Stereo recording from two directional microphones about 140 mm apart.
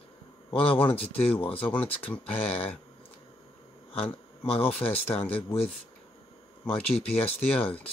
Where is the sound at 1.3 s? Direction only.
40° left (ahead or behind).